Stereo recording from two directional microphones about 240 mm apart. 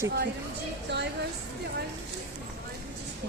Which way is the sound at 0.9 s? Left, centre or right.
Right.